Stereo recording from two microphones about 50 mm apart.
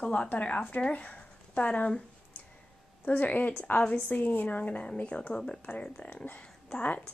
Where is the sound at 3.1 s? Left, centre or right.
Left.